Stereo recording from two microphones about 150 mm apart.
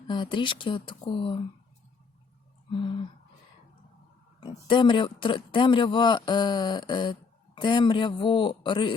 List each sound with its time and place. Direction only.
0.1 s speech: 30° left (ahead or behind)
4.4 s speech: 30° left (ahead or behind)